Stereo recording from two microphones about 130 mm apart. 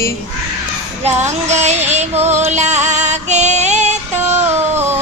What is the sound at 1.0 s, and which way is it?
Music, 60° right (ahead or behind).